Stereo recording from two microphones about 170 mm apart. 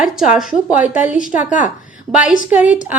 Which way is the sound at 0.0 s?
5° right (ahead or behind).